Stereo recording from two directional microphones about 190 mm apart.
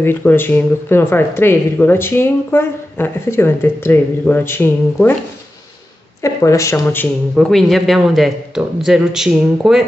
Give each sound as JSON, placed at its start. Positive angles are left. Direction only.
{"t": 0.0, "sound": "speech", "side_deg": 10}
{"t": 6.2, "sound": "speech", "side_deg": 15}
{"t": 7.3, "sound": "speech", "side_deg": 0}